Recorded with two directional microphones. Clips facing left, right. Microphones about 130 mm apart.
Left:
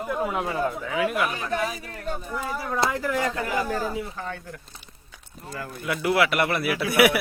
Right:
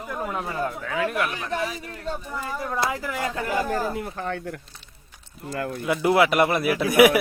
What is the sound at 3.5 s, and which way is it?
Speech, 45° right (ahead or behind).